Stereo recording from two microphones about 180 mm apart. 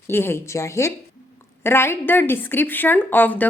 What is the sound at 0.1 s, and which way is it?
A woman's voice, 15° left (ahead or behind).